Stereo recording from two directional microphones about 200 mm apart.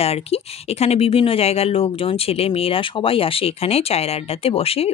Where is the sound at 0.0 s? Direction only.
30° left (ahead or behind).